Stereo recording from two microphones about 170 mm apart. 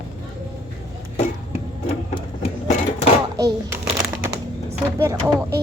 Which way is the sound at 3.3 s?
20° right (ahead or behind).